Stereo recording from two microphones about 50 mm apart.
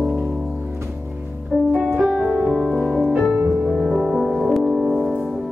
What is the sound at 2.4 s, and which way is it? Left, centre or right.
Music, right.